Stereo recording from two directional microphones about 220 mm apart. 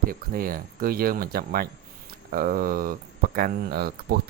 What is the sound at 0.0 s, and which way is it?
Speech, 40° right (ahead or behind).